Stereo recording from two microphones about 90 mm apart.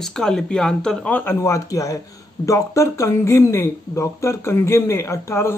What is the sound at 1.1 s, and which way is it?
Speech, 25° left (ahead or behind).